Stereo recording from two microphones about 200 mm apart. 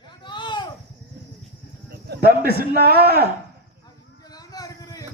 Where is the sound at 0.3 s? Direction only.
20° left (ahead or behind).